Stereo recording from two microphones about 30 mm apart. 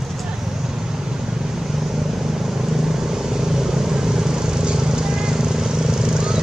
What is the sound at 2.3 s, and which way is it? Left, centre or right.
Vehicle, centre.